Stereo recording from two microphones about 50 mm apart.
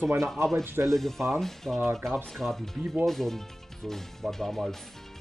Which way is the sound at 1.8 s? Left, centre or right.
Right.